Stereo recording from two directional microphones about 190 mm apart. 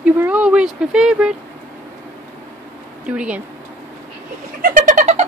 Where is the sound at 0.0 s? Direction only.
5° right (ahead or behind).